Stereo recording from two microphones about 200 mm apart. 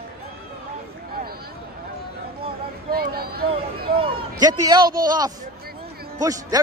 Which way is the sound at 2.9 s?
50° right (ahead or behind).